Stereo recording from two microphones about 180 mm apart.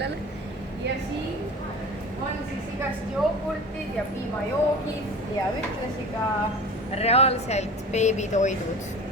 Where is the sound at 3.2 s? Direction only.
Centre (ahead or behind).